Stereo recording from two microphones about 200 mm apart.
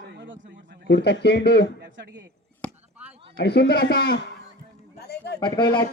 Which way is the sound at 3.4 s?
55° left (ahead or behind).